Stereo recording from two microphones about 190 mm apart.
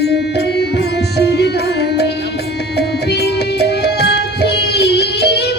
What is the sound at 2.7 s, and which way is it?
Music, 60° left (ahead or behind).